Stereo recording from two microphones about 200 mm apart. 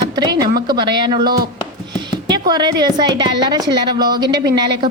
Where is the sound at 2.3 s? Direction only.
20° right (ahead or behind).